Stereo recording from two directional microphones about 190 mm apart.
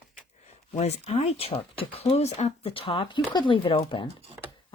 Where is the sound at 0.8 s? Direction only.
35° left (ahead or behind).